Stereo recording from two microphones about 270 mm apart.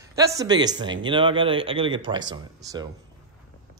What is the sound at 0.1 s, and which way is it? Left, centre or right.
Speech, centre.